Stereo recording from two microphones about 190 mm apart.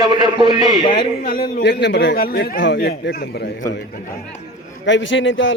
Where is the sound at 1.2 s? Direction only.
60° left (ahead or behind).